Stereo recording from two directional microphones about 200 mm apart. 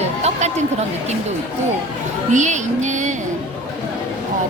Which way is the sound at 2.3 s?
35° right (ahead or behind).